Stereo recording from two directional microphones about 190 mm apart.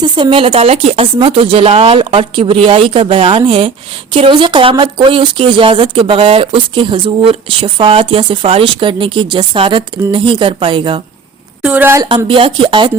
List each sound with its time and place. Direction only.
0.0 s speech: 25° right (ahead or behind)
11.6 s a woman's voice: 10° right (ahead or behind)
12.0 s speech: 25° right (ahead or behind)